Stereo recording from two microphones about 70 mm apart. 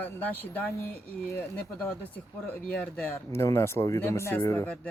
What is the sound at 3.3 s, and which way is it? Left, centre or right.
Speech, left.